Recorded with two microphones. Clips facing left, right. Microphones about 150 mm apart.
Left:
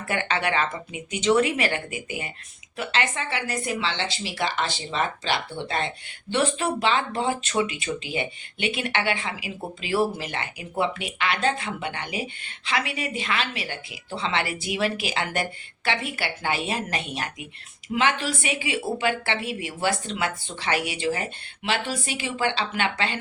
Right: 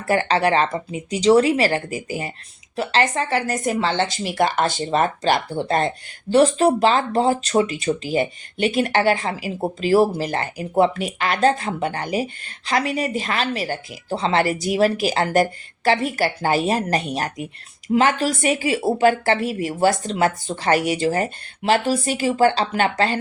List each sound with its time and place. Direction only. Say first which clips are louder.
0.1 s speech: right 8 dB; 35° right (ahead or behind)